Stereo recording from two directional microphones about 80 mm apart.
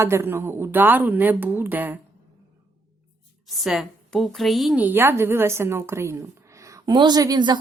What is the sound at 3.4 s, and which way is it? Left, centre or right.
A woman's voice, centre.